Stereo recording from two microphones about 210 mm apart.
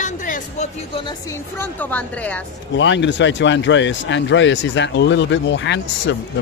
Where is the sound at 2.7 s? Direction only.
60° left (ahead or behind).